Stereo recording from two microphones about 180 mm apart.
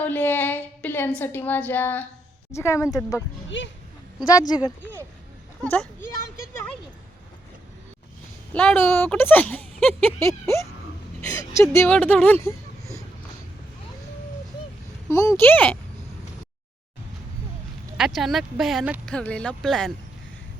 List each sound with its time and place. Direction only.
0.0 s speech: 10° left (ahead or behind)
4.4 s speech: 20° left (ahead or behind)
8.5 s speech: 10° left (ahead or behind)
15.1 s speech: 15° left (ahead or behind)
17.9 s speech: centre (ahead or behind)